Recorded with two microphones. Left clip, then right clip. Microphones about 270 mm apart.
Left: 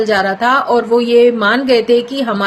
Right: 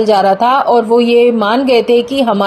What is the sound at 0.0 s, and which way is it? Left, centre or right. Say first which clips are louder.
Speech: right 4 dB; centre.